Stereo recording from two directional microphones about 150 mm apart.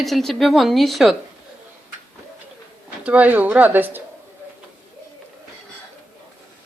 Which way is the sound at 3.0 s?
10° right (ahead or behind).